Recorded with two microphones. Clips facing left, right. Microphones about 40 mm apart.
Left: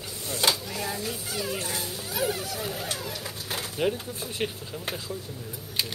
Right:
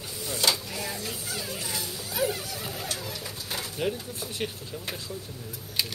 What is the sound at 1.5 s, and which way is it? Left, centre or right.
Speech, left.